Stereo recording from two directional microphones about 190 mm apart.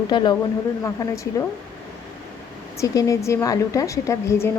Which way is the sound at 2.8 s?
15° left (ahead or behind).